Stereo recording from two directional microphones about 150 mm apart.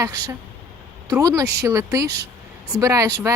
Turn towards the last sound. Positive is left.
turn(degrees=-20)  # may be behind; listen again after turning